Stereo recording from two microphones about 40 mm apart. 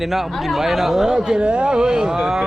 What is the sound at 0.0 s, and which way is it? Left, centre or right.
A woman's voice, centre.